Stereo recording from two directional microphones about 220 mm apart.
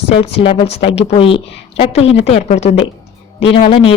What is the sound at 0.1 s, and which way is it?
A woman's voice, 25° left (ahead or behind).